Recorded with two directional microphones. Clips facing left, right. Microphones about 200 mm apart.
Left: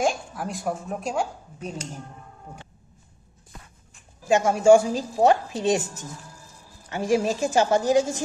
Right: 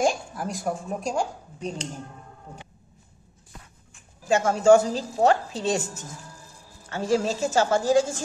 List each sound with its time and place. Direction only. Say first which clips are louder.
0.0 s speech: right 1 dB; centre (ahead or behind)
4.3 s a woman's voice: left 1 dB; 15° left (ahead or behind)